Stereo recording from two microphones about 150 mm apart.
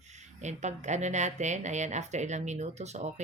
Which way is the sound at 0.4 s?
50° right (ahead or behind).